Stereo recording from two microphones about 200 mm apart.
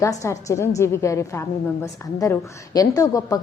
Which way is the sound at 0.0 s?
15° left (ahead or behind).